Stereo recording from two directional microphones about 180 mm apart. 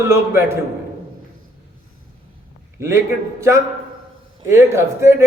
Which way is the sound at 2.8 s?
15° right (ahead or behind).